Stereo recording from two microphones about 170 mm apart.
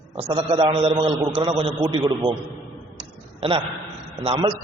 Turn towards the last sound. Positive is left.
turn(degrees=-30)  # may be behind; listen again after turning